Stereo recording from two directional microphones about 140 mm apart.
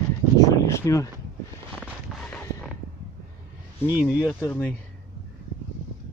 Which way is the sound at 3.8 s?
15° right (ahead or behind).